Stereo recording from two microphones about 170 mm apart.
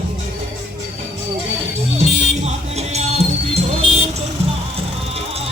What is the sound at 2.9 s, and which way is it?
Music, 40° right (ahead or behind).